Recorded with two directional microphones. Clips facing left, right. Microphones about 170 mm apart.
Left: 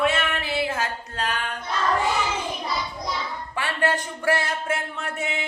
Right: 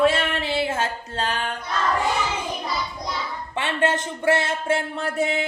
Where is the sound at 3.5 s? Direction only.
20° right (ahead or behind).